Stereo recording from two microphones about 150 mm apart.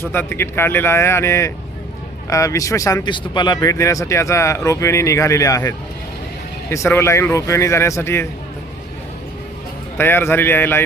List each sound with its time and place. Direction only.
0.1 s speech: 15° left (ahead or behind)
10.0 s speech: 15° left (ahead or behind)